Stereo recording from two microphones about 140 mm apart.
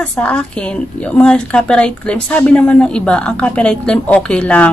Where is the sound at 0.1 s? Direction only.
5° left (ahead or behind).